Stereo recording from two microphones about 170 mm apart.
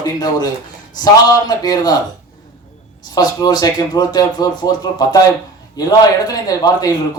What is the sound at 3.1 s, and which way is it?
Speech, 25° left (ahead or behind).